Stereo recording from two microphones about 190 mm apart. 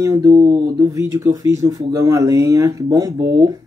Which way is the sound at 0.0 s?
15° right (ahead or behind).